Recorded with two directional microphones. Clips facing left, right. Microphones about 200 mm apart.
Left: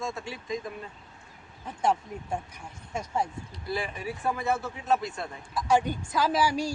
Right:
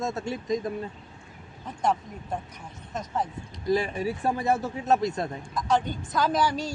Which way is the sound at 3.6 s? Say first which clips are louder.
Right 7 dB; 40° right (ahead or behind).